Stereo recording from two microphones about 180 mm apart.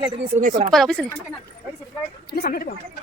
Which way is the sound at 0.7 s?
Centre (ahead or behind).